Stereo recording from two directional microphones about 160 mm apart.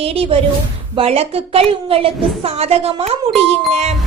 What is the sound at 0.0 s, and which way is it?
A woman's voice, 40° right (ahead or behind).